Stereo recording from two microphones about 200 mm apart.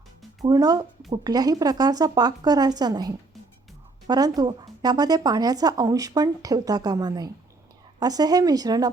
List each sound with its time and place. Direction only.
0.4 s speech: 20° right (ahead or behind)